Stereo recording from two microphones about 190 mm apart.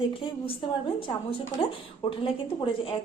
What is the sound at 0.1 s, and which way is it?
A woman's voice, 30° left (ahead or behind).